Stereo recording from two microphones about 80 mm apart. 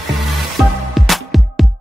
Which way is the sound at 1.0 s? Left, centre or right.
Centre.